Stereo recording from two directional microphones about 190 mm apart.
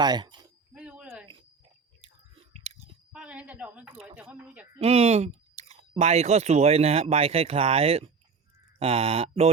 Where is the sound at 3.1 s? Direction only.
5° right (ahead or behind).